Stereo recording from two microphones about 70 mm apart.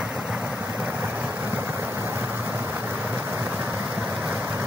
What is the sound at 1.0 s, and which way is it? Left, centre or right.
Vehicle, right.